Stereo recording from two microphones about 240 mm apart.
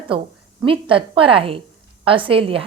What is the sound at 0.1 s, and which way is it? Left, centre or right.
A woman's voice, right.